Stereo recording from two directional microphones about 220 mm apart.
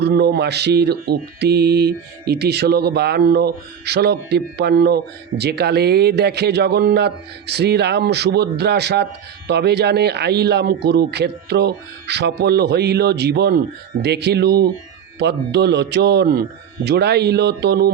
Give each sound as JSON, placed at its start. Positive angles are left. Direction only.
{"t": 0.0, "sound": "speech", "side_deg": -45}